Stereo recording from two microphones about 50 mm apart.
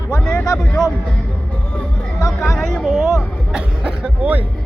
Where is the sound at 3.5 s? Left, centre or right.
Centre.